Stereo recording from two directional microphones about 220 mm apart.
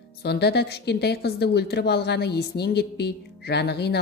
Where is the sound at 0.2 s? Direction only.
50° left (ahead or behind).